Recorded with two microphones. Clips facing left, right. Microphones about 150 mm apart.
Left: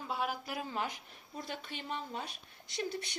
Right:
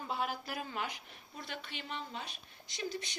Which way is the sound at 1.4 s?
40° left (ahead or behind).